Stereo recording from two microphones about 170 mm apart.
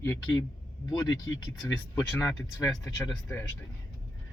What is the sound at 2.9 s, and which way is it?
Speech, 20° left (ahead or behind).